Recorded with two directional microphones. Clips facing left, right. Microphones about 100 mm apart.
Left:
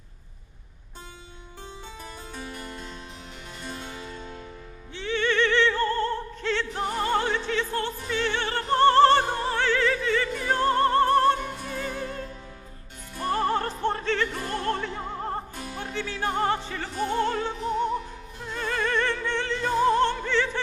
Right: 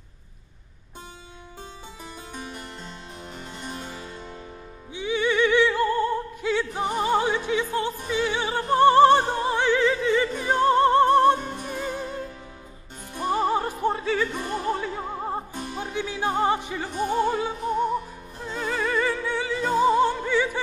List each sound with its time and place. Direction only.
2.3 s harpsichord: 20° right (ahead or behind)
4.9 s music: 10° right (ahead or behind)
13.1 s opera: 15° right (ahead or behind)
15.5 s music: 25° right (ahead or behind)
18.5 s opera: 5° right (ahead or behind)